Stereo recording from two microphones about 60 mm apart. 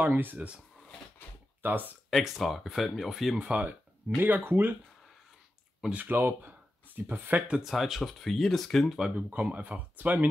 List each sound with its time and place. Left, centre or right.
0.1 s speech: right
1.6 s speech: right
2.0 s speech: centre
3.3 s speech: right
4.2 s speech: right
5.9 s speech: right
6.1 s speech: right
7.5 s speech: centre
9.1 s speech: right